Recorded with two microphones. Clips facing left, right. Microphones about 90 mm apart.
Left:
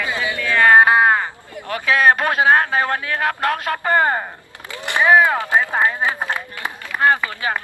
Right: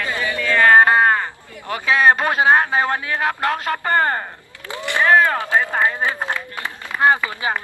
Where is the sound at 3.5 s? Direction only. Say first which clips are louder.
Left 1 dB; centre (ahead or behind); by 6.4 s 15° left (ahead or behind).